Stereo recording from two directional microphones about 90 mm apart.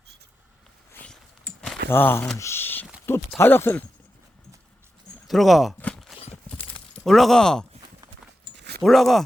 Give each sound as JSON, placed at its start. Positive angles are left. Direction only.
{"t": 1.9, "sound": "speech", "side_deg": 25}
{"t": 2.4, "sound": "a sound", "side_deg": 25}
{"t": 3.1, "sound": "speech", "side_deg": 25}
{"t": 5.3, "sound": "speech", "side_deg": 0}
{"t": 6.1, "sound": "clip-clop", "side_deg": 0}
{"t": 7.0, "sound": "speech", "side_deg": 5}
{"t": 8.8, "sound": "speech", "side_deg": 0}